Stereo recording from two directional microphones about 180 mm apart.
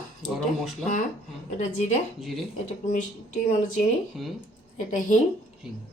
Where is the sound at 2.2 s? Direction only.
Centre (ahead or behind).